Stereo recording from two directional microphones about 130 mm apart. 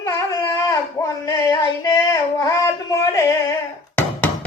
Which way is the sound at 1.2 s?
30° left (ahead or behind).